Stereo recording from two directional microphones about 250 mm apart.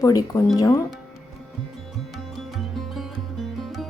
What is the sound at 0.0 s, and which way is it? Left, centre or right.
Speech, centre.